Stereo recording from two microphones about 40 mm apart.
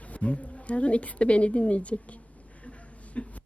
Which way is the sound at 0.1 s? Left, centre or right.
Left.